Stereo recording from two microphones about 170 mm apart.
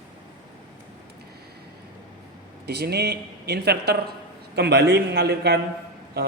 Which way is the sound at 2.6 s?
70° right (ahead or behind).